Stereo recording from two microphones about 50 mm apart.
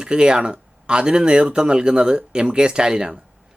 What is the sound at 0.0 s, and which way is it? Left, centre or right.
Speech, centre.